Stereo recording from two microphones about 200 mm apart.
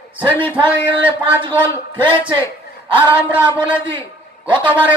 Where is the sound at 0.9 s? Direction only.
25° right (ahead or behind).